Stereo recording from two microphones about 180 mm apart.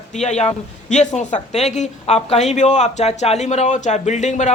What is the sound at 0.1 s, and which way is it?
Speech, 40° left (ahead or behind).